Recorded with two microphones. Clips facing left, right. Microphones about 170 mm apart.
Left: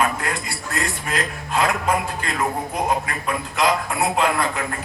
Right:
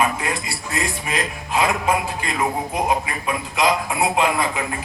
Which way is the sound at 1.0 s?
15° right (ahead or behind).